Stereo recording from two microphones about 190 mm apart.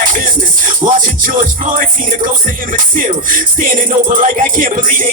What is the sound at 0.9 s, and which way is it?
Music, 45° right (ahead or behind).